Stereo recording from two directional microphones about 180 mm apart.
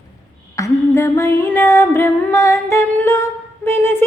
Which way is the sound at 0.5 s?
15° left (ahead or behind).